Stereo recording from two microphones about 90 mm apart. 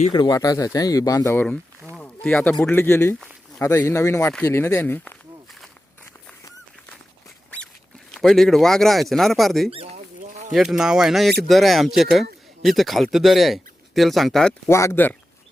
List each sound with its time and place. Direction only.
0.1 s speech: 50° left (ahead or behind)
2.2 s a man's voice: 15° left (ahead or behind)
2.7 s speech: 30° left (ahead or behind)
8.1 s speech: centre (ahead or behind)
14.7 s speech: 30° left (ahead or behind)